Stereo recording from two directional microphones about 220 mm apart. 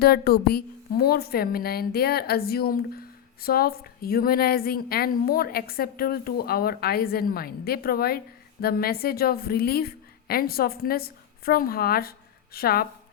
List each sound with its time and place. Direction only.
0.0 s a woman's voice: 45° left (ahead or behind)